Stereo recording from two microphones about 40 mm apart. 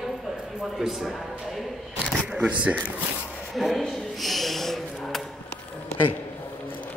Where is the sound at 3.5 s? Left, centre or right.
Centre.